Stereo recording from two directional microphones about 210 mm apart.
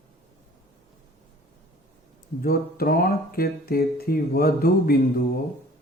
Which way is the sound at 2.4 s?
45° left (ahead or behind).